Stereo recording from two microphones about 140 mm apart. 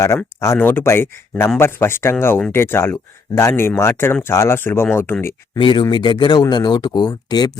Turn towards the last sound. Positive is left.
turn(degrees=30)  # may be behind; listen again after turning